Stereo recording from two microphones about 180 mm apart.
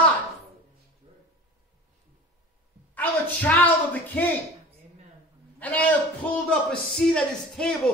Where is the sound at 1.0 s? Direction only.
30° right (ahead or behind).